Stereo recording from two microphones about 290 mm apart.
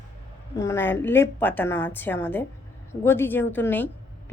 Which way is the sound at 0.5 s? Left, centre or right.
Centre.